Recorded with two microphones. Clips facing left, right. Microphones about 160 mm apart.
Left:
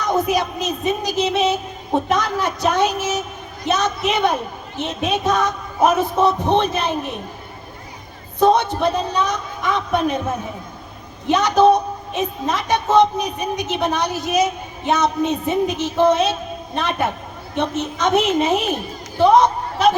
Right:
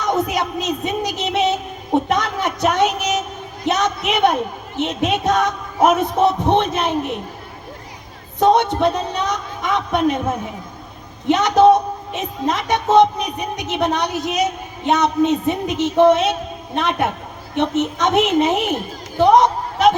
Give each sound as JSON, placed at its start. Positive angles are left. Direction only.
{"t": 0.0, "sound": "a woman's voice", "side_deg": -20}
{"t": 8.4, "sound": "a woman's voice", "side_deg": -20}
{"t": 11.3, "sound": "a woman's voice", "side_deg": -20}